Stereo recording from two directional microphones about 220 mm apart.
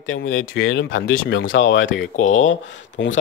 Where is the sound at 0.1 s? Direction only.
60° left (ahead or behind).